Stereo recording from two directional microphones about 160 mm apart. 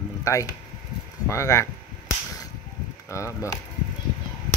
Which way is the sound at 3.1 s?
20° left (ahead or behind).